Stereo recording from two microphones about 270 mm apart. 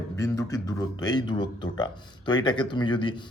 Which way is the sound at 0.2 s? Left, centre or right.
Centre.